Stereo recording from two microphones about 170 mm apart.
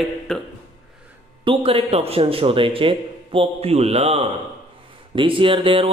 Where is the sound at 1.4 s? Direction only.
35° right (ahead or behind).